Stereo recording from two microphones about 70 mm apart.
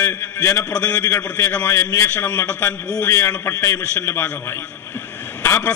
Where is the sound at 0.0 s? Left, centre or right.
Left.